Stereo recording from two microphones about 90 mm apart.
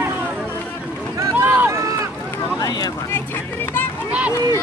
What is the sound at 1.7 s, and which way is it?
Run, 40° right (ahead or behind).